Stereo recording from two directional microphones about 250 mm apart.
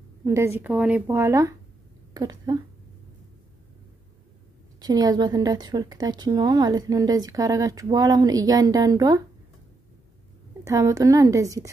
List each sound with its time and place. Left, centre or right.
0.2 s a woman's voice: centre
4.7 s a woman's voice: centre
10.6 s a woman's voice: centre